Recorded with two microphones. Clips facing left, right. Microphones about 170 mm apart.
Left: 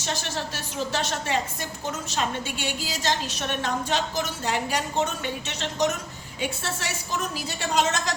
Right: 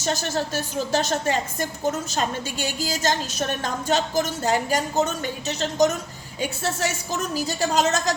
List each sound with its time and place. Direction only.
0.0 s a woman's voice: 40° right (ahead or behind)